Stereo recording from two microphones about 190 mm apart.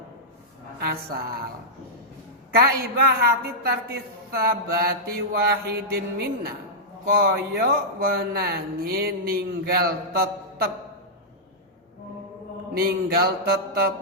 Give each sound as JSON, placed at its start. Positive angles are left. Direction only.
{"t": 0.8, "sound": "speech", "side_deg": -55}
{"t": 2.6, "sound": "a man's voice", "side_deg": -55}
{"t": 12.7, "sound": "a man's voice", "side_deg": -55}